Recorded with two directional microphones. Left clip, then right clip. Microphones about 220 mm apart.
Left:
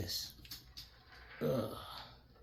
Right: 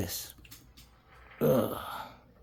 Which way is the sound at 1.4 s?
50° right (ahead or behind).